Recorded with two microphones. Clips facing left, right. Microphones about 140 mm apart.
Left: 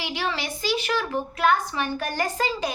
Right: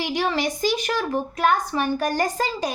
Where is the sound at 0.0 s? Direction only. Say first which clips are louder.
Right 6 dB; 45° right (ahead or behind).